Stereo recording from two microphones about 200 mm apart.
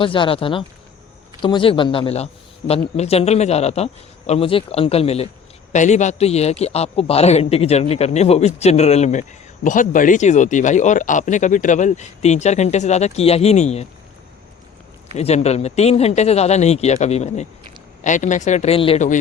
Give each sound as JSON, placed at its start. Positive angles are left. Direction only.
{"t": 0.0, "sound": "a man's voice", "side_deg": 25}
{"t": 15.1, "sound": "speech", "side_deg": 30}